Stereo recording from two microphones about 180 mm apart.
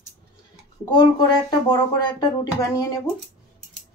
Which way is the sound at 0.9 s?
25° left (ahead or behind).